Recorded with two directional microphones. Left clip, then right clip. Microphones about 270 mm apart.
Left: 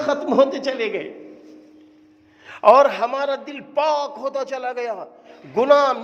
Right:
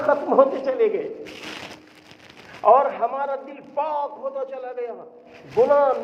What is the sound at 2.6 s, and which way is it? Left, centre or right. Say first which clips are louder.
A man's voice: left 4 dB; left.